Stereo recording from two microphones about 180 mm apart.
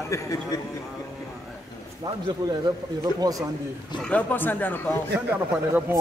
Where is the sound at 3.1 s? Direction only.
20° right (ahead or behind).